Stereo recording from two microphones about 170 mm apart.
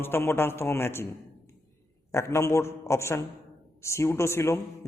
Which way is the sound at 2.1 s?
15° left (ahead or behind).